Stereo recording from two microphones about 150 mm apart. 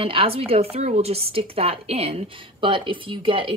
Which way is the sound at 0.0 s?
40° right (ahead or behind).